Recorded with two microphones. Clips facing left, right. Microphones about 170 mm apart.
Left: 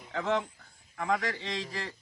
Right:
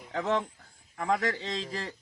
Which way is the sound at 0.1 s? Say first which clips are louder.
Right 1 dB; 35° right (ahead or behind).